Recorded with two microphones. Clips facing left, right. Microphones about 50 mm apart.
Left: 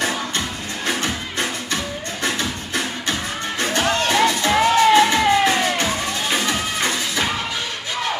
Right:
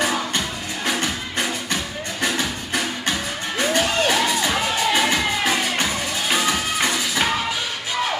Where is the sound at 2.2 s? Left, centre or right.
Left.